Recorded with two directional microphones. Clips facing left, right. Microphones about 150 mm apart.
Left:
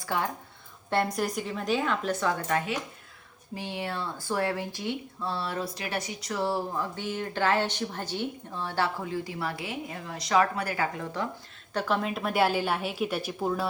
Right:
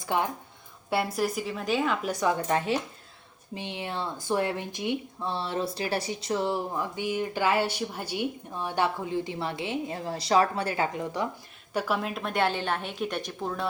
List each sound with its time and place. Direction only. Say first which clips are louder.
0.0 s speech: right 2 dB; 20° right (ahead or behind)
0.9 s a woman's voice: even; 5° right (ahead or behind)